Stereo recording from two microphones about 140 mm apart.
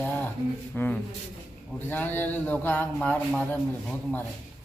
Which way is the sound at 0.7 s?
10° left (ahead or behind).